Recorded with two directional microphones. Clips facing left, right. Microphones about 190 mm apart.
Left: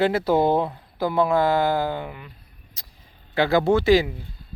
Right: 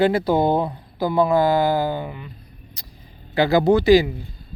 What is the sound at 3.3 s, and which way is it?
Speech, centre (ahead or behind).